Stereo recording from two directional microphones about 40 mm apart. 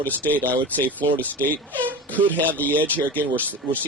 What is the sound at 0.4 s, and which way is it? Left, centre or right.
Speech, left.